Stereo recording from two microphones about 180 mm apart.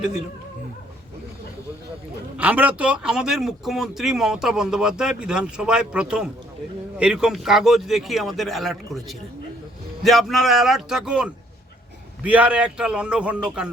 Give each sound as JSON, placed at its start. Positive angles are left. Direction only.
{"t": 2.4, "sound": "a man's voice", "side_deg": -10}